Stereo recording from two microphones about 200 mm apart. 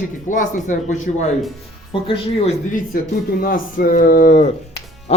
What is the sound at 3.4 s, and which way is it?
Speech, 45° left (ahead or behind).